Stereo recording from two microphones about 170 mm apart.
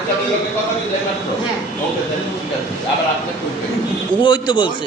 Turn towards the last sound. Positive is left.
turn(degrees=30)  # may be behind; listen again after turning